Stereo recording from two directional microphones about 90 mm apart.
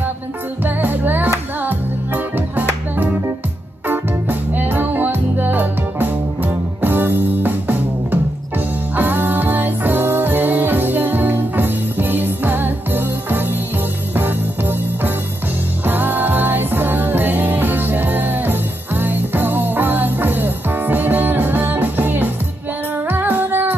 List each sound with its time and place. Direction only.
0.7 s music: 20° right (ahead or behind)
15.8 s music: 20° right (ahead or behind)